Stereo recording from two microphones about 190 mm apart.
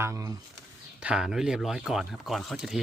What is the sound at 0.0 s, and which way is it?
Speech, 15° right (ahead or behind).